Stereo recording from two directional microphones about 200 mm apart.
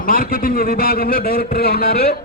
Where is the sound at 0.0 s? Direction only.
45° left (ahead or behind).